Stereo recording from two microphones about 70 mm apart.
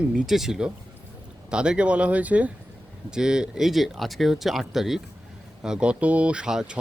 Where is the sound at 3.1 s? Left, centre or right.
Centre.